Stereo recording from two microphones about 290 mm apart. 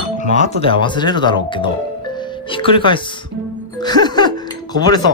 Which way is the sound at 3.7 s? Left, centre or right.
Centre.